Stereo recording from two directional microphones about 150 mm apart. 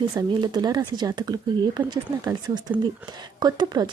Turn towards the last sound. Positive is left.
turn(degrees=-30)  # may be behind; listen again after turning